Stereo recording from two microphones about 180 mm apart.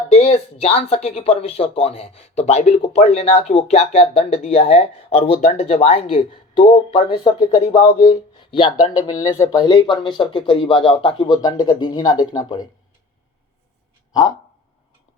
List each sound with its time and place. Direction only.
0.1 s speech: 35° left (ahead or behind)
14.1 s speech: 20° left (ahead or behind)